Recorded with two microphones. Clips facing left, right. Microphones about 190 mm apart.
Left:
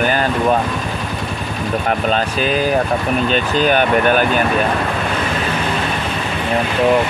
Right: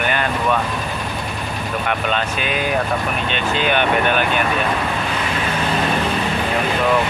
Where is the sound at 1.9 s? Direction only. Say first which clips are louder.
Left 3 dB; 35° left (ahead or behind).